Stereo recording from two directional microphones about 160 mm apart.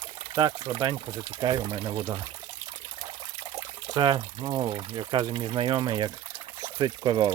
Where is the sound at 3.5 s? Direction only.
25° right (ahead or behind).